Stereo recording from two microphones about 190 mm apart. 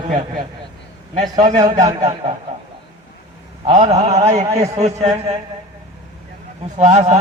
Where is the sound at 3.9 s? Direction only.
35° right (ahead or behind).